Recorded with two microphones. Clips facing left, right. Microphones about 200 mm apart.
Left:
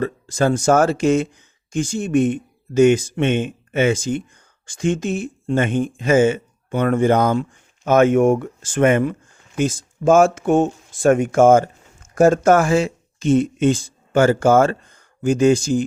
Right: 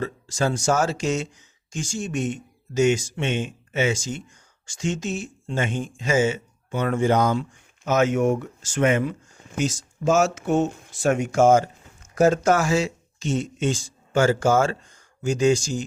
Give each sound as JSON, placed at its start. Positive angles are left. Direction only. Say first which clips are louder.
{"t": 0.0, "sound": "speech", "louder": "left 6 dB", "side_deg": 55}